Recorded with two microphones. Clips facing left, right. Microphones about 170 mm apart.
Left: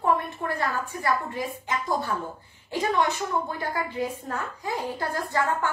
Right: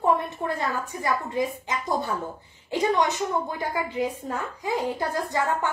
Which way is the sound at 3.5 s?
15° right (ahead or behind).